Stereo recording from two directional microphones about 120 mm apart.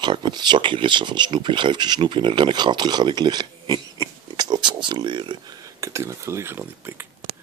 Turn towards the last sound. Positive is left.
turn(degrees=-20)  # may be behind; listen again after turning